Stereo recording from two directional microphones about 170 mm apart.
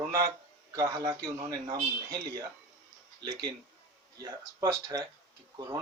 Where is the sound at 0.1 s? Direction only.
20° right (ahead or behind).